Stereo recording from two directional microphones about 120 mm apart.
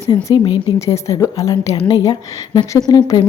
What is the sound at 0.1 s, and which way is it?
A woman's voice, 35° left (ahead or behind).